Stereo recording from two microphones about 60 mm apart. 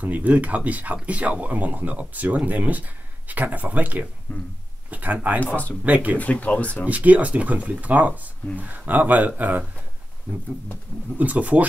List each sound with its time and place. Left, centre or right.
0.0 s speech: right
4.3 s a sound: left
4.9 s speech: right
6.1 s speech: left
6.9 s speech: right
11.1 s speech: right